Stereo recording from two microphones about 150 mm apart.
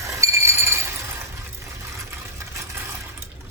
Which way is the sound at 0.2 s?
20° right (ahead or behind).